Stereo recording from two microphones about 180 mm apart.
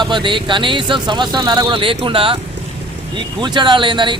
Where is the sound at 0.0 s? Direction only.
25° right (ahead or behind).